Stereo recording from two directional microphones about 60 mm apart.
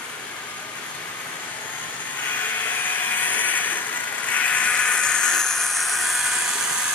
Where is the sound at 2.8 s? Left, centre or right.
Left; by 6.3 s centre.